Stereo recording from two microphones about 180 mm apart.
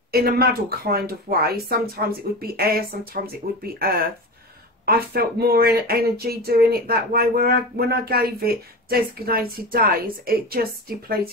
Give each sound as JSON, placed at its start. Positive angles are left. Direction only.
{"t": 0.1, "sound": "speech", "side_deg": -60}